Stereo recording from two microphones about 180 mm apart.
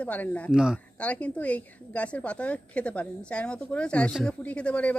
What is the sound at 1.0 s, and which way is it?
A woman's voice, 5° left (ahead or behind).